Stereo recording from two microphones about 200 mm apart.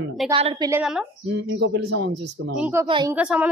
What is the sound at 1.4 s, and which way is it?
Speech, 60° right (ahead or behind).